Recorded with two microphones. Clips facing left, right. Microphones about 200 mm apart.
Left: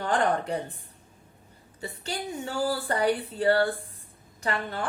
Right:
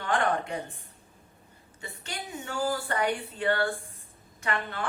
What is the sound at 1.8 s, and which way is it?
A woman's voice, 35° left (ahead or behind).